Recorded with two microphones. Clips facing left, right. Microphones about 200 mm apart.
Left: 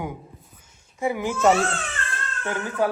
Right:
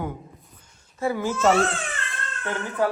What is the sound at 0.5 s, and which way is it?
Babbling, 10° left (ahead or behind).